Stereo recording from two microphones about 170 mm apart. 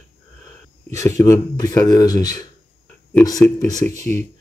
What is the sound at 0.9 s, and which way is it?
Speech, 20° left (ahead or behind).